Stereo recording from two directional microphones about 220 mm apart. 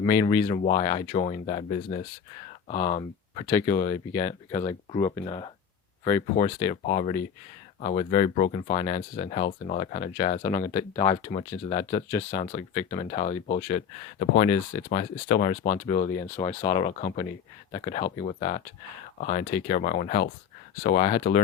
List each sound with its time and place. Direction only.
0.0 s speech: 20° left (ahead or behind)
3.4 s speech: 15° left (ahead or behind)
3.8 s speech: 30° left (ahead or behind)
4.1 s speech: 15° left (ahead or behind)
12.3 s speech: 35° left (ahead or behind)
12.7 s speech: 20° left (ahead or behind)
13.1 s speech: 30° left (ahead or behind)
14.2 s speech: 35° left (ahead or behind)
17.0 s speech: 35° left (ahead or behind)
17.7 s speech: 20° left (ahead or behind); by 21.4 s 40° left (ahead or behind)